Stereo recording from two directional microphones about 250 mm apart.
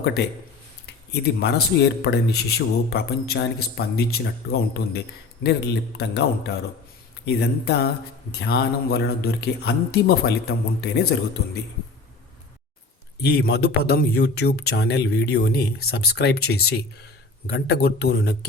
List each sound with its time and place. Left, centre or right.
0.2 s a man's voice: left
13.2 s a man's voice: left